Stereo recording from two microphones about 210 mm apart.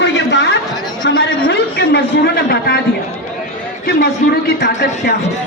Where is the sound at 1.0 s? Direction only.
55° left (ahead or behind).